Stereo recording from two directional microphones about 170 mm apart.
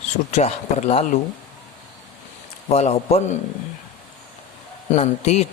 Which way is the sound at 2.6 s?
40° left (ahead or behind).